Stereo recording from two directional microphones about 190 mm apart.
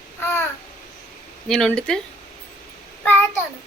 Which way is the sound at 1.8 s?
5° left (ahead or behind).